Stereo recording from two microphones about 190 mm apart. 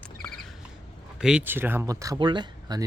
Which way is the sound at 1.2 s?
5° right (ahead or behind).